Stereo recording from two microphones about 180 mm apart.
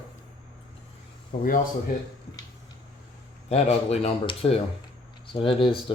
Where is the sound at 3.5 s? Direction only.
35° left (ahead or behind).